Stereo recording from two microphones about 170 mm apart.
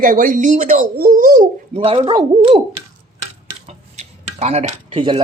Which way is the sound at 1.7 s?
35° right (ahead or behind).